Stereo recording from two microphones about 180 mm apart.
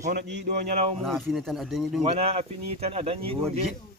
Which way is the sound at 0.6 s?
40° right (ahead or behind).